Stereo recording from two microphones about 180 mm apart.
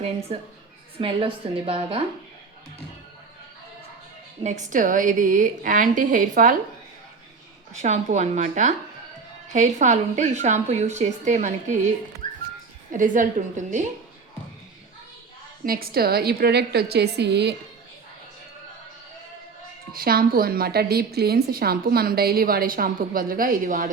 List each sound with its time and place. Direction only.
0.3 s a woman's voice: 30° right (ahead or behind)
4.4 s a woman's voice: 45° right (ahead or behind)
7.7 s a woman's voice: 40° right (ahead or behind)
12.9 s a woman's voice: 45° right (ahead or behind)
15.6 s a woman's voice: 55° right (ahead or behind)
19.9 s a woman's voice: 55° right (ahead or behind)